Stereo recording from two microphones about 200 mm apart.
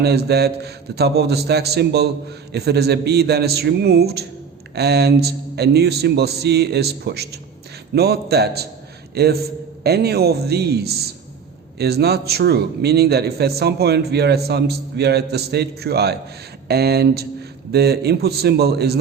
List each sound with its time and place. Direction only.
0.0 s a man's voice: 55° right (ahead or behind)